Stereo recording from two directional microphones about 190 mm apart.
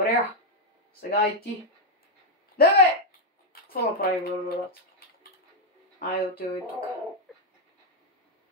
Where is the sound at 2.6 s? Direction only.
55° left (ahead or behind).